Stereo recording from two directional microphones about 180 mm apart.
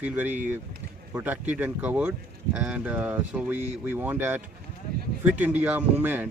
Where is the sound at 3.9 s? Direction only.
10° right (ahead or behind).